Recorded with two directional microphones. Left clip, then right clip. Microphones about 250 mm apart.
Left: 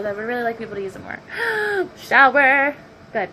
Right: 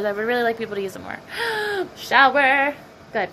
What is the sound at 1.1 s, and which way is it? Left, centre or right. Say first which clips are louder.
A woman's voice: left 5 dB; right.